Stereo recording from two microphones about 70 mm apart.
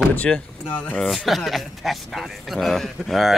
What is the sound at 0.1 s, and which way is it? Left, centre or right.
Speech, left.